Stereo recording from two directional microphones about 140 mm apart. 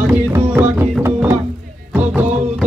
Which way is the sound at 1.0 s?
15° right (ahead or behind).